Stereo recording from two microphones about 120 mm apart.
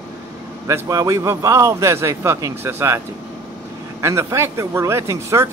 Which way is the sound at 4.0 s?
25° right (ahead or behind).